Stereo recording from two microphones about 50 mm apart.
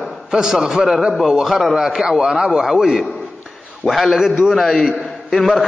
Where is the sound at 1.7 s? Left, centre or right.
Centre.